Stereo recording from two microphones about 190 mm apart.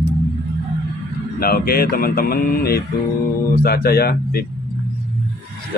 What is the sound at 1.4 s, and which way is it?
Mantra, 50° left (ahead or behind).